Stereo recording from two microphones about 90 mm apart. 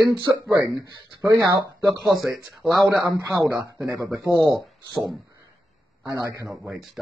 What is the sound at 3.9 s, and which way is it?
Speech, 30° right (ahead or behind).